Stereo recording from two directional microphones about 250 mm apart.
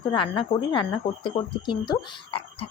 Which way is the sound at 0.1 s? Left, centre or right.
Centre.